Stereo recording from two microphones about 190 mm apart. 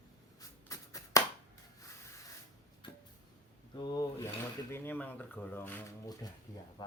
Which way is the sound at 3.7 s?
20° left (ahead or behind).